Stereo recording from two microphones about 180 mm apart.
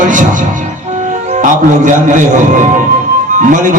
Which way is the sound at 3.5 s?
45° right (ahead or behind).